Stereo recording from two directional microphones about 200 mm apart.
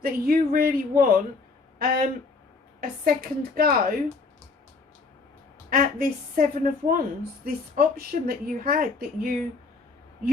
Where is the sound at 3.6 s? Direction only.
45° right (ahead or behind).